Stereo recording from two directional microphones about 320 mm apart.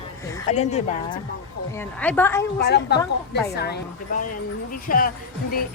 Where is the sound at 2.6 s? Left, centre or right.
Left.